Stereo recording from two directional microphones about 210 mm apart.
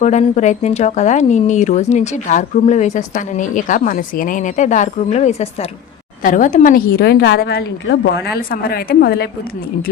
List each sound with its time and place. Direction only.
0.0 s a woman's voice: 35° left (ahead or behind)